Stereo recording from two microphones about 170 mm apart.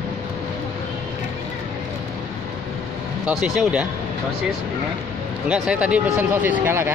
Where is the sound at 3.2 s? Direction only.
5° right (ahead or behind).